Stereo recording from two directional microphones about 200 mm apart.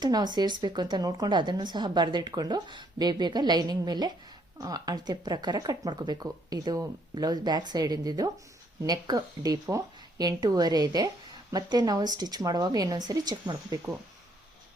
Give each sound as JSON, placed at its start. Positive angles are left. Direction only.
{"t": 0.0, "sound": "a woman's voice", "side_deg": -20}